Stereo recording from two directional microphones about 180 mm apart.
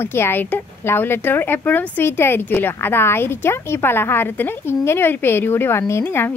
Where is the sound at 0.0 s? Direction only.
15° left (ahead or behind).